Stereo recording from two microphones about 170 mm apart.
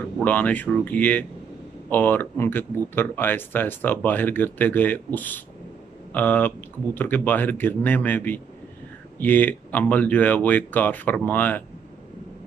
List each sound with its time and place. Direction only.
0.2 s speech: 10° left (ahead or behind)